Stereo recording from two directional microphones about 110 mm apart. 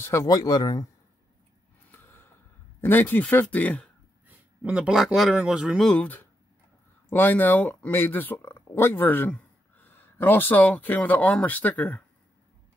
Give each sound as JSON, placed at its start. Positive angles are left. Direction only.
{"t": 0.0, "sound": "speech", "side_deg": 25}
{"t": 1.9, "sound": "a sound", "side_deg": 20}
{"t": 2.8, "sound": "speech", "side_deg": 20}
{"t": 4.6, "sound": "speech", "side_deg": -10}
{"t": 7.1, "sound": "speech", "side_deg": 15}